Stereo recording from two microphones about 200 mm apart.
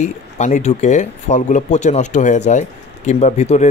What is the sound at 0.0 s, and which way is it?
Speech, 35° left (ahead or behind).